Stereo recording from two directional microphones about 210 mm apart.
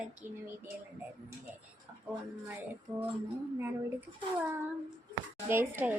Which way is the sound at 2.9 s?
20° right (ahead or behind).